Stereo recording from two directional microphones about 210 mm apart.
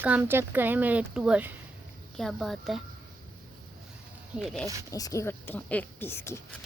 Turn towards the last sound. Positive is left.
turn(degrees=10)  # may be behind; listen again after turning